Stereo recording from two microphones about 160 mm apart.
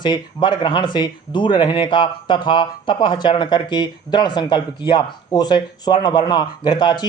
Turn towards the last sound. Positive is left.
turn(degrees=30)  # may be behind; listen again after turning